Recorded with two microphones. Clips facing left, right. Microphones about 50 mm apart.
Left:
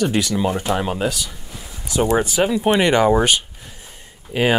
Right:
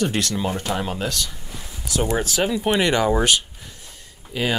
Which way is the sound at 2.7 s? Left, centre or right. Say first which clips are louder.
Left 4 dB; centre.